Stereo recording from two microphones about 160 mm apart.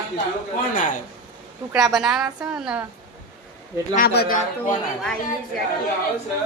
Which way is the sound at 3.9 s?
75° left (ahead or behind).